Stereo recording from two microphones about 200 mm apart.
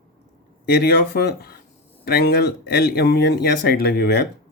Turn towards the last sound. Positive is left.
turn(degrees=55)  # may be behind; listen again after turning